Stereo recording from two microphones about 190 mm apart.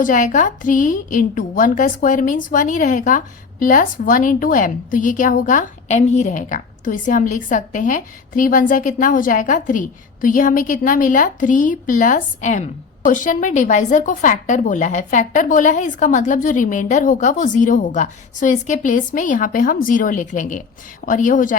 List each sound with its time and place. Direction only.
0.0 s a woman's voice: 45° left (ahead or behind)